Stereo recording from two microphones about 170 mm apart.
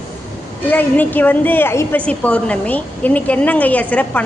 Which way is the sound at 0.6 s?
10° left (ahead or behind).